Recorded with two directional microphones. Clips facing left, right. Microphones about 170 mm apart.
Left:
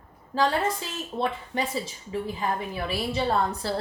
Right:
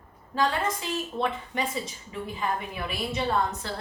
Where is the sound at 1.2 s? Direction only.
30° left (ahead or behind).